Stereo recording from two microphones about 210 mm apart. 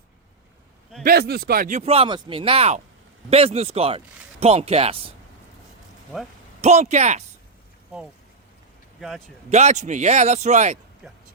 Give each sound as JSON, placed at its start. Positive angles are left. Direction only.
{"t": 1.0, "sound": "speech", "side_deg": -45}
{"t": 6.6, "sound": "speech", "side_deg": -30}
{"t": 9.0, "sound": "speech", "side_deg": 0}
{"t": 9.5, "sound": "speech", "side_deg": -30}
{"t": 11.0, "sound": "speech", "side_deg": -5}